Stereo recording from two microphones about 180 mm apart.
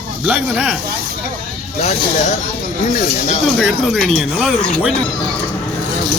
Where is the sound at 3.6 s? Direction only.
Centre (ahead or behind).